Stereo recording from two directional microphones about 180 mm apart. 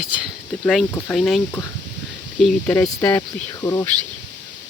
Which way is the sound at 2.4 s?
5° left (ahead or behind).